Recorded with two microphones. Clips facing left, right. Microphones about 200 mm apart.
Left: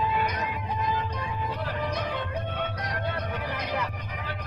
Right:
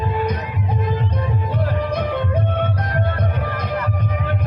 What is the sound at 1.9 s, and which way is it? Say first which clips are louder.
Music: right 9 dB; 55° right (ahead or behind).